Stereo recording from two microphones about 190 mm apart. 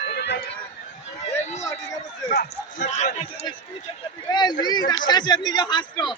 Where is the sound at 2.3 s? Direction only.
45° left (ahead or behind).